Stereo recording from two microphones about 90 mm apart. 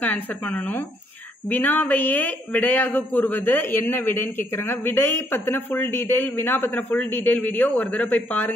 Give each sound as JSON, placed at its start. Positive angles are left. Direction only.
{"t": 0.0, "sound": "a man's voice", "side_deg": 15}